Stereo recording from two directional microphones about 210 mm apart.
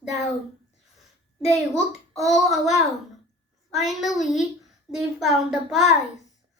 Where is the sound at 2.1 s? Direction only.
Centre (ahead or behind).